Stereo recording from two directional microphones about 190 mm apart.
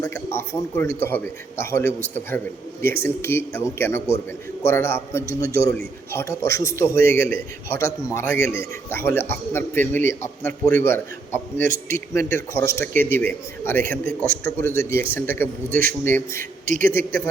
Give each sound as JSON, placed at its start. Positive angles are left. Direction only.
{"t": 0.0, "sound": "a man's voice", "side_deg": 15}
{"t": 16.4, "sound": "a man's voice", "side_deg": -45}
{"t": 16.8, "sound": "a man's voice", "side_deg": 10}